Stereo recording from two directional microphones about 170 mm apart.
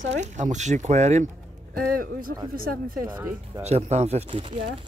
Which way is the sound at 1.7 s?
60° right (ahead or behind).